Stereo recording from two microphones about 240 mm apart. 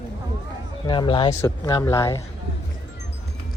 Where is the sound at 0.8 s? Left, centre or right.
Centre.